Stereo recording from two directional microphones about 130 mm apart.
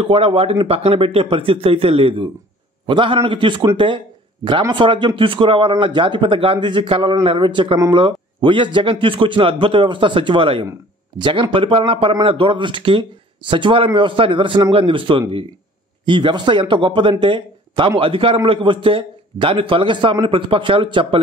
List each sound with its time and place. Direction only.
0.0 s speech: 45° right (ahead or behind)